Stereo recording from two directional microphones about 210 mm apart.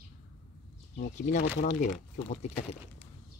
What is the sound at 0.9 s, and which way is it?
Speech, 40° left (ahead or behind).